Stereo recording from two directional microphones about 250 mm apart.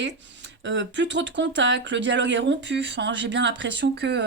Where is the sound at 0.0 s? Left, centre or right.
Right.